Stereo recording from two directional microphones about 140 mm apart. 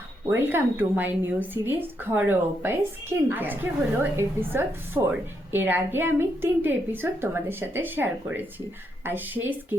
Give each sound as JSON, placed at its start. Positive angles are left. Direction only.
{"t": 0.3, "sound": "a woman's voice", "side_deg": -15}
{"t": 5.5, "sound": "a woman's voice", "side_deg": -15}